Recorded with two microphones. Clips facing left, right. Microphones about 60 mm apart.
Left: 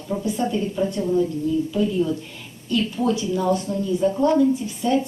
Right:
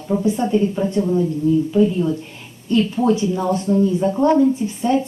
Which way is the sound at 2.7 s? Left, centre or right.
Right.